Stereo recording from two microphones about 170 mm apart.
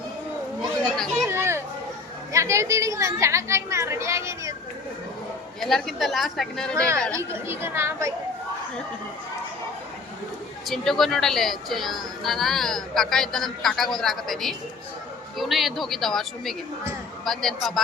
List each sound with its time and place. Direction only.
0.9 s speech: centre (ahead or behind)
1.3 s chatter: 15° right (ahead or behind)
2.3 s a woman's voice: 15° right (ahead or behind)
5.5 s speech: centre (ahead or behind)
6.7 s a woman's voice: 15° right (ahead or behind)
10.7 s speech: centre (ahead or behind)